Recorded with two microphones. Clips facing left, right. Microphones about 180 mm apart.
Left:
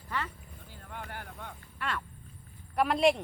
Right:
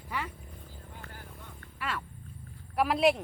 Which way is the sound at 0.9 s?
75° left (ahead or behind).